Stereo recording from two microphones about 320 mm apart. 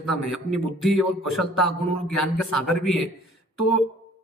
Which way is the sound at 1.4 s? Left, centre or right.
Left.